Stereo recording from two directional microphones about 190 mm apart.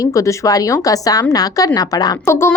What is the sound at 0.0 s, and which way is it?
A woman's voice, 15° left (ahead or behind).